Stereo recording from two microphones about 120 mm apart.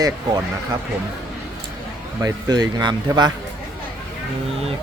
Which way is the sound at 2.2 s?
35° right (ahead or behind).